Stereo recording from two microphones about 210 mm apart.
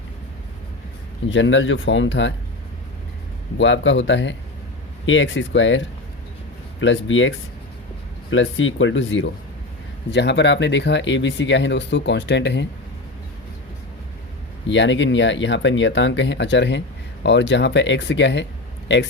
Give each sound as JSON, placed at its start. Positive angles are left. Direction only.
{"t": 1.3, "sound": "speech", "side_deg": 65}
{"t": 3.6, "sound": "speech", "side_deg": 60}
{"t": 14.7, "sound": "speech", "side_deg": 60}